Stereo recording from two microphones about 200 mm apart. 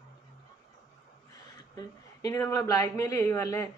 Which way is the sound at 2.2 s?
15° left (ahead or behind).